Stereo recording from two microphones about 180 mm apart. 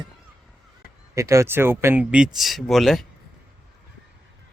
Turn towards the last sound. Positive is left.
turn(degrees=0)  # may be behind; listen again after turning